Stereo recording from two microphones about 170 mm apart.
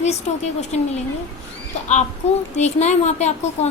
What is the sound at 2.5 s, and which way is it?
Speech, 40° left (ahead or behind).